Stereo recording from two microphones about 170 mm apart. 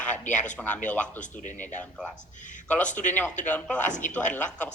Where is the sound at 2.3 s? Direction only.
50° left (ahead or behind).